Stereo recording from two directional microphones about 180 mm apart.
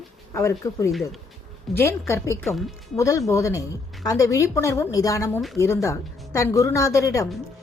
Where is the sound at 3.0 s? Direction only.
15° left (ahead or behind).